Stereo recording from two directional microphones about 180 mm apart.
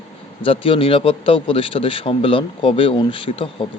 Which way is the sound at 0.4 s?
30° left (ahead or behind).